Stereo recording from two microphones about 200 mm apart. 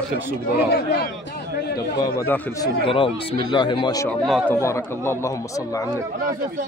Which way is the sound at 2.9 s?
25° left (ahead or behind).